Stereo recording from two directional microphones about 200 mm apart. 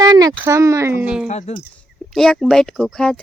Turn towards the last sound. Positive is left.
turn(degrees=5)  # may be behind; listen again after turning